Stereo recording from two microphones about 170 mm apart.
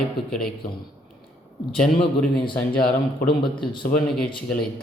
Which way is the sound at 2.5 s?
60° left (ahead or behind).